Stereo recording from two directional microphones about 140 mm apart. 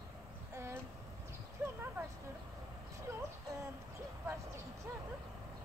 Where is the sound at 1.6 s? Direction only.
15° right (ahead or behind).